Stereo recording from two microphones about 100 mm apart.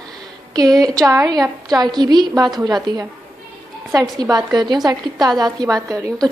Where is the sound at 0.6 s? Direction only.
40° right (ahead or behind).